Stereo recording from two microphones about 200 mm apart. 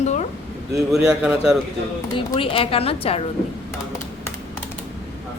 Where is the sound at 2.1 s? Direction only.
25° left (ahead or behind).